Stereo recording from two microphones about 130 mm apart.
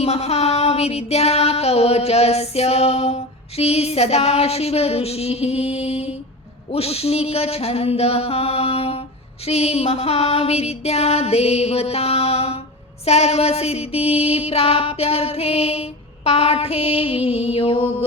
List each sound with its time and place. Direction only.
0.0 s music: 55° left (ahead or behind)